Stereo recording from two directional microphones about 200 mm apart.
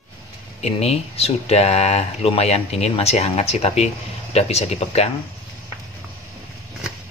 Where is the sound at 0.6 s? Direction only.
30° left (ahead or behind).